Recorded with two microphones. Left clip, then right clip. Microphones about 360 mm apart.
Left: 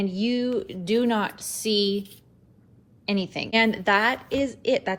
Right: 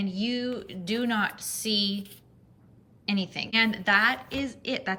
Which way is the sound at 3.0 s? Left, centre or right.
Centre.